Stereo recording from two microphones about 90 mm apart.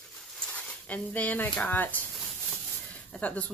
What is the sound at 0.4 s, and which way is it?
Speech, 15° left (ahead or behind).